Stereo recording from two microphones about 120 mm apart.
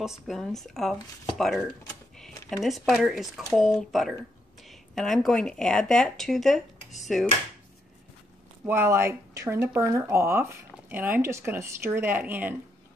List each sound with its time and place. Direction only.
0.0 s speech: centre (ahead or behind)
8.6 s speech: 20° right (ahead or behind)